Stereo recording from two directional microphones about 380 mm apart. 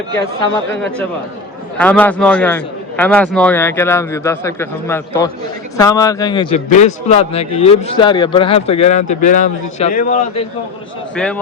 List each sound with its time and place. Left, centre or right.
0.4 s a man's voice: centre